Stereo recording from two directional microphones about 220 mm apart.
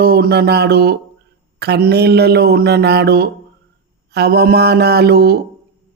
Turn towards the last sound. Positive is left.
turn(degrees=-45)  # may be behind; listen again after turning